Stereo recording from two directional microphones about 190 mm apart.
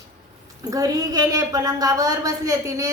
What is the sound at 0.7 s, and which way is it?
A woman's voice, 20° right (ahead or behind).